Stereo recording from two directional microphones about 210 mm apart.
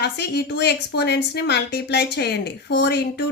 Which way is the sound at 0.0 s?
50° left (ahead or behind).